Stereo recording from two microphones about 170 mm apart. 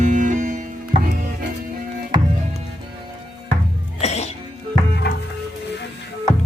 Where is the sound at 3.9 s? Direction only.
40° left (ahead or behind).